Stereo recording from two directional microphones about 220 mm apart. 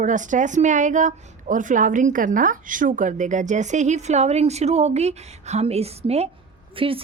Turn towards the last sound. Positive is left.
turn(degrees=-25)  # may be behind; listen again after turning